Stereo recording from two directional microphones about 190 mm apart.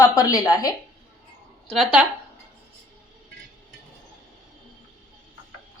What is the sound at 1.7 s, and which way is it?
Speech, 5° right (ahead or behind).